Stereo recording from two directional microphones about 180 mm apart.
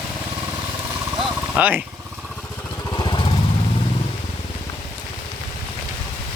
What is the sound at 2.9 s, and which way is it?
Vehicle, 25° left (ahead or behind).